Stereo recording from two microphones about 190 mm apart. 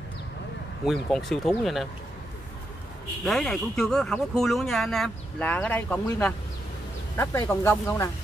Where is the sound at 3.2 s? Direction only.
Centre (ahead or behind).